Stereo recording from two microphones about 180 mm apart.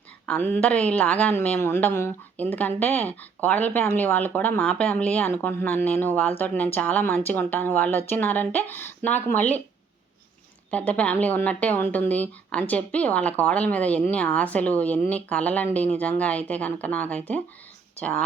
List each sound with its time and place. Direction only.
0.3 s speech: 10° left (ahead or behind)
10.7 s speech: 5° left (ahead or behind)